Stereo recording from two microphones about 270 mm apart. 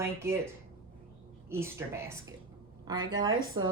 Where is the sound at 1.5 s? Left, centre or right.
Centre.